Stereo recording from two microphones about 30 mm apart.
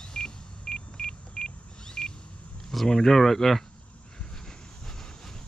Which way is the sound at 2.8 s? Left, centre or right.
Centre.